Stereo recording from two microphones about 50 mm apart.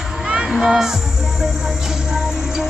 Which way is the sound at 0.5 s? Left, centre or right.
Centre.